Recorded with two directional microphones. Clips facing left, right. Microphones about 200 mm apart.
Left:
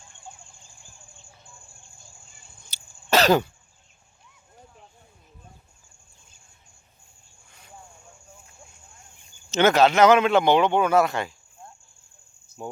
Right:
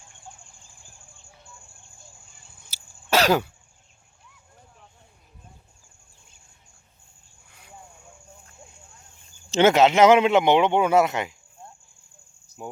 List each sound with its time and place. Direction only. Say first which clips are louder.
2.6 s cough: even; 5° right (ahead or behind)
9.5 s speech: right 1 dB; 25° right (ahead or behind)